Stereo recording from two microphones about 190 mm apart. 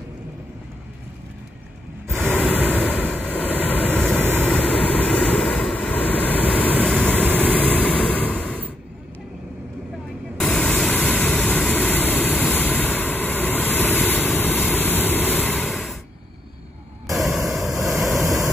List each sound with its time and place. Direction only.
2.1 s vehicle: 5° left (ahead or behind)
10.4 s vehicle: 5° left (ahead or behind)
17.1 s static: centre (ahead or behind)
17.5 s vehicle: centre (ahead or behind)
18.2 s vehicle: 15° right (ahead or behind)